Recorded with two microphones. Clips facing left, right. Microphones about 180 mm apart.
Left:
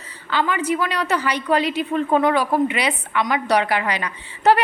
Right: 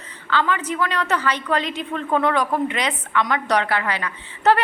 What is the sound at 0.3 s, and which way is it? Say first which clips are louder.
A woman's voice: left 1 dB; 10° left (ahead or behind).